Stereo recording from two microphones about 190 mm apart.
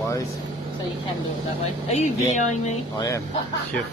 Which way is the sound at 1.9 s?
35° left (ahead or behind).